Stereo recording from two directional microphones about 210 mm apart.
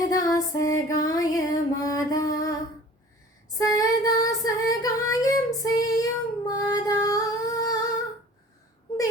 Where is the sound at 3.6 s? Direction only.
15° left (ahead or behind).